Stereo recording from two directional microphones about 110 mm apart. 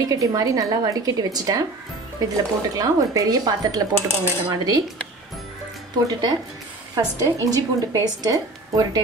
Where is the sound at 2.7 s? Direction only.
35° right (ahead or behind).